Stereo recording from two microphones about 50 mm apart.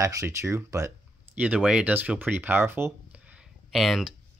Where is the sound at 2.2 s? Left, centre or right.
Right.